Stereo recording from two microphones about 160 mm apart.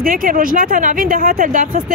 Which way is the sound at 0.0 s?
60° right (ahead or behind).